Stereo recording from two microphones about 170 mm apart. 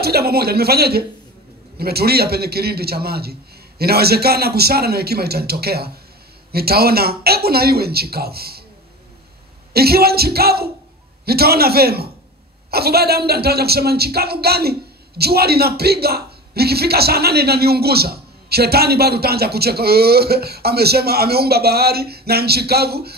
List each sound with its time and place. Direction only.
0.0 s speech: 65° right (ahead or behind)
9.8 s speech: 65° right (ahead or behind)